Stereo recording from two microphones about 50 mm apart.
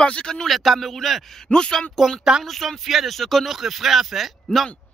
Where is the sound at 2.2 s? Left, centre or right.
Centre.